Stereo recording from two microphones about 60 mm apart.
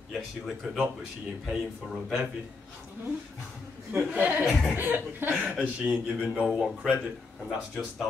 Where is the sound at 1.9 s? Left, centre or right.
Centre.